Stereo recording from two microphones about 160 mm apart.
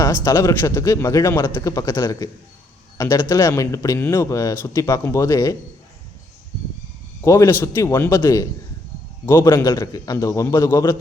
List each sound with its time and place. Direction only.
0.0 s a man's voice: 20° left (ahead or behind)
7.2 s a man's voice: 20° left (ahead or behind)